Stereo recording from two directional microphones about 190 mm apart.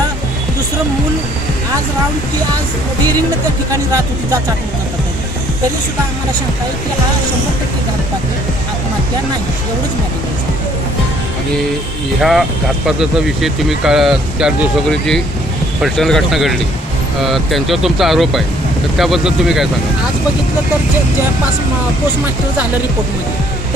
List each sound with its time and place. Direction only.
3.7 s speech: 15° right (ahead or behind)
12.2 s speech: centre (ahead or behind)